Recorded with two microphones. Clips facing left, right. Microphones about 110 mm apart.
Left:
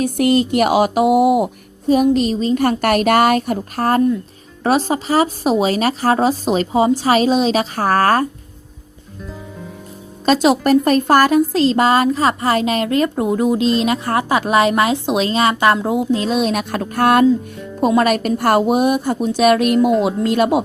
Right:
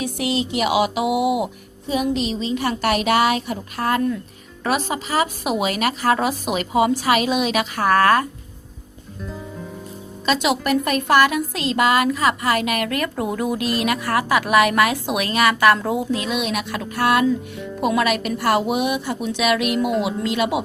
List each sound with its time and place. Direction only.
0.0 s a woman's voice: 50° left (ahead or behind)
10.2 s a woman's voice: 40° left (ahead or behind)
19.8 s speech: 5° right (ahead or behind)
20.1 s a woman's voice: 45° left (ahead or behind)